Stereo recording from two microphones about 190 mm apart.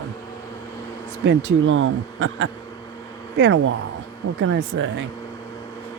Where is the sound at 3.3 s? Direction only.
80° right.